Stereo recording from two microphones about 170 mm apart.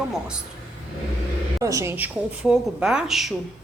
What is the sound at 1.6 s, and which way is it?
A woman's voice, 20° right (ahead or behind).